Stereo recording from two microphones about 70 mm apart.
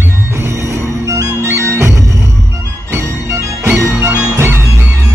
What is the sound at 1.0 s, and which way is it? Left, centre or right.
Music, right.